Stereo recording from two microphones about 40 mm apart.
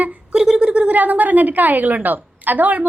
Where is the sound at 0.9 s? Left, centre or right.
Right.